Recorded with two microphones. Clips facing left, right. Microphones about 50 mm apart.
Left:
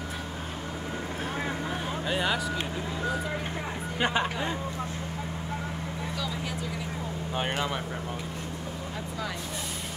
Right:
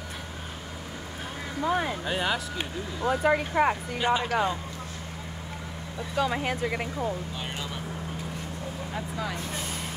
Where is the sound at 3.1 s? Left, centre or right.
Right.